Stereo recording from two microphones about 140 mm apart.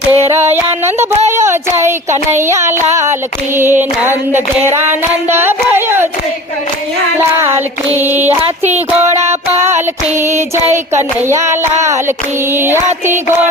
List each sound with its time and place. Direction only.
0.1 s female singing: 15° right (ahead or behind)
1.3 s child singing: 20° right (ahead or behind)
2.9 s female singing: 20° right (ahead or behind)
7.3 s female singing: 15° right (ahead or behind)
8.3 s a sound: 50° right (ahead or behind)
10.2 s child singing: 20° right (ahead or behind)
12.5 s female singing: 15° right (ahead or behind)